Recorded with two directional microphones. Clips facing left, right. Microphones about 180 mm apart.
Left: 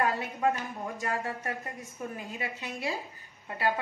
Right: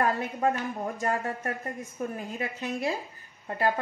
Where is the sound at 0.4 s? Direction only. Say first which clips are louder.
Even; 45° right (ahead or behind).